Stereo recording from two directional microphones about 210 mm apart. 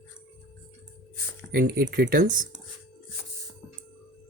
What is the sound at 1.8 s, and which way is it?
Speech, 50° right (ahead or behind).